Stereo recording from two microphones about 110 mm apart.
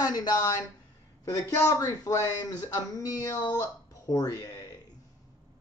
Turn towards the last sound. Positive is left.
turn(degrees=35)  # may be behind; listen again after turning